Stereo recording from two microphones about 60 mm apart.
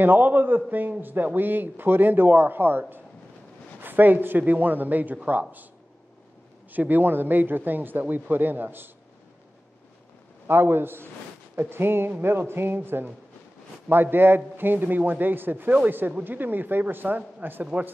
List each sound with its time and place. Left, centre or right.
0.0 s speech: right
6.7 s speech: right
10.4 s speech: right
14.1 s speech: right